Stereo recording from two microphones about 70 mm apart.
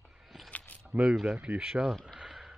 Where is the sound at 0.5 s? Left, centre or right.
Left.